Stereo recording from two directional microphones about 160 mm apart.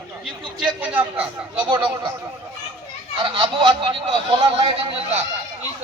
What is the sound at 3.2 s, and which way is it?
Speech, 30° right (ahead or behind).